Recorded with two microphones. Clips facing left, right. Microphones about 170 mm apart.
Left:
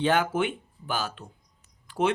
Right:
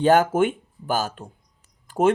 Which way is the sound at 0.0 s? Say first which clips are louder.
Right 7 dB; 45° right (ahead or behind).